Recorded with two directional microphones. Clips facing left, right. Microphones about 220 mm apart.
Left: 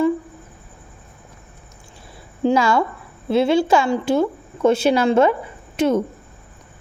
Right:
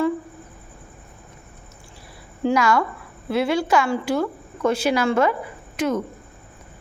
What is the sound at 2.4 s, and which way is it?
A woman's voice, 25° left (ahead or behind).